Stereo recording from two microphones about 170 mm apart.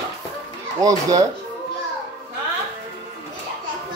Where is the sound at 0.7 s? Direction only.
20° right (ahead or behind).